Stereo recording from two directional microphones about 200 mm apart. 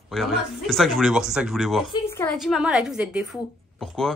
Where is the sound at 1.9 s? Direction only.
10° left (ahead or behind).